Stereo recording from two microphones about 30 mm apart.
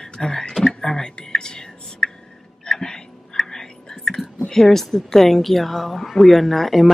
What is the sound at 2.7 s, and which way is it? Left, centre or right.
Whispering, centre.